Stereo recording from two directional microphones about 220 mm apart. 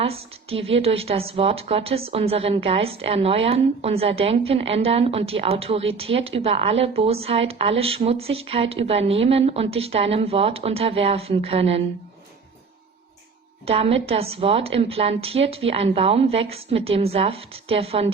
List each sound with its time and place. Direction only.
0.0 s a woman's voice: 25° right (ahead or behind)
13.7 s a woman's voice: 25° right (ahead or behind)